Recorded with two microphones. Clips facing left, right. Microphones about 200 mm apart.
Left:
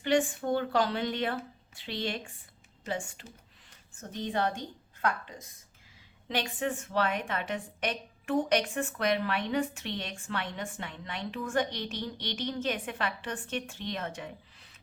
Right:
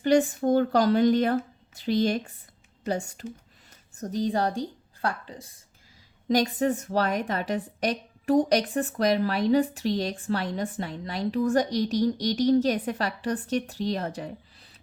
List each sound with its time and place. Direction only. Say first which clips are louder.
0.0 s a woman's voice: right 6 dB; 40° right (ahead or behind)